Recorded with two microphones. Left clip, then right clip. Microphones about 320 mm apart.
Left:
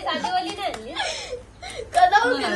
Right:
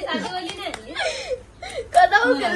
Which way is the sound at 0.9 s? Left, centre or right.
Right.